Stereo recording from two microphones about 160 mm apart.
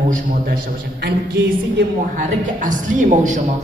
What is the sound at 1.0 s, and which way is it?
Speech, 90° right.